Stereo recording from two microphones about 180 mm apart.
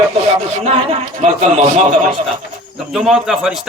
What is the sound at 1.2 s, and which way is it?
Speech, 40° right (ahead or behind).